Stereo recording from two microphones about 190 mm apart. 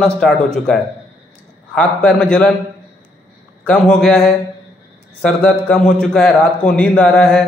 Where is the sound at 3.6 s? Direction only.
5° left (ahead or behind).